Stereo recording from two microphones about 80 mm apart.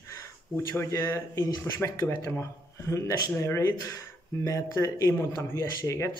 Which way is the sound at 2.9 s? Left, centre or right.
Left.